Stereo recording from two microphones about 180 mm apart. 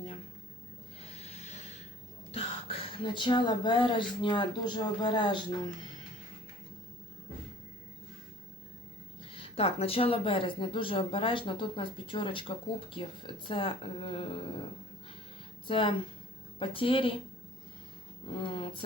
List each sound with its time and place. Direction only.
1.1 s a sound: 35° left (ahead or behind)
2.3 s speech: 30° left (ahead or behind)
9.3 s speech: 30° left (ahead or behind)
15.6 s speech: 30° left (ahead or behind)
18.3 s speech: 30° left (ahead or behind)